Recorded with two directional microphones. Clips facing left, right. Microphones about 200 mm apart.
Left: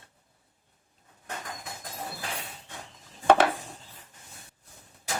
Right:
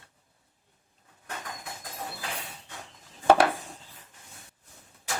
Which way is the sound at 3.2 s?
10° right (ahead or behind).